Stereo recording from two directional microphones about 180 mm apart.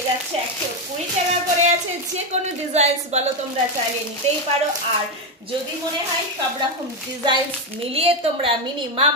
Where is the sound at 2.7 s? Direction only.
35° right (ahead or behind).